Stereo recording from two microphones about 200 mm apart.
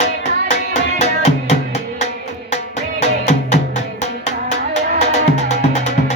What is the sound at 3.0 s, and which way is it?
Music, 35° left (ahead or behind).